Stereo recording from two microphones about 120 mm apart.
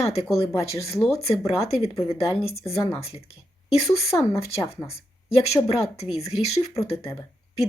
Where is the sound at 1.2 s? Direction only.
60° left (ahead or behind).